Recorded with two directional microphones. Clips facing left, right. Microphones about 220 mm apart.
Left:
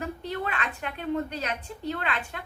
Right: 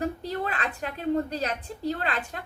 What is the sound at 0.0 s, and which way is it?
A woman's voice, 35° right (ahead or behind).